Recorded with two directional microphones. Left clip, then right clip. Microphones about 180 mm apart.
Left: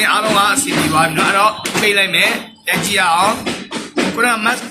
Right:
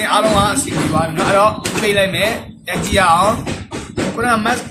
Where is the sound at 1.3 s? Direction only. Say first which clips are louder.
Even; 25° right (ahead or behind).